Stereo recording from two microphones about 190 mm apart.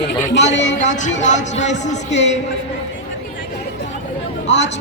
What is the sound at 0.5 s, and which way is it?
Speech, 70° left (ahead or behind).